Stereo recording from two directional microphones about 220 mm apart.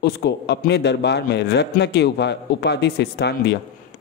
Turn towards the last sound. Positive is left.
turn(degrees=50)  # may be behind; listen again after turning